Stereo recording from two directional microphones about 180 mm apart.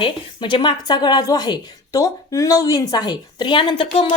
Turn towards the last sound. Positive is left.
turn(degrees=25)  # may be behind; listen again after turning